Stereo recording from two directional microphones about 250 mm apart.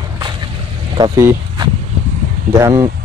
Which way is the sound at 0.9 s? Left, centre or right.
Centre.